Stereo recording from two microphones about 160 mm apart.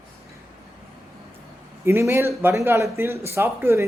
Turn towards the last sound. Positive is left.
turn(degrees=-15)  # may be behind; listen again after turning